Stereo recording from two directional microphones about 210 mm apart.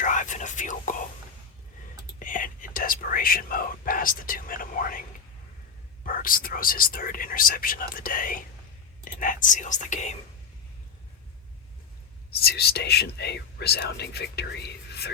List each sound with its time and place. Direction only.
0.0 s whispering: 35° left (ahead or behind)
2.1 s whispering: 40° left (ahead or behind)
6.1 s speech: 40° left (ahead or behind)
12.3 s speech: 50° left (ahead or behind)